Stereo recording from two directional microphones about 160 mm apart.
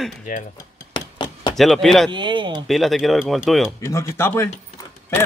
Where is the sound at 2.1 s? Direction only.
30° right (ahead or behind).